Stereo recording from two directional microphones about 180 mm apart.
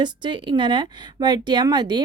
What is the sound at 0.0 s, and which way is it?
A woman's voice, 25° right (ahead or behind).